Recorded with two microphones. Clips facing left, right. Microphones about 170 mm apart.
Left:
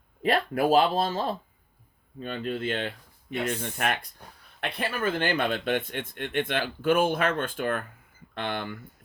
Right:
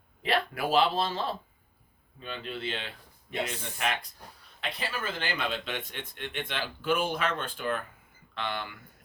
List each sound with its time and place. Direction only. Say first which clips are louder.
0.2 s speech: left 5 dB; 45° left (ahead or behind)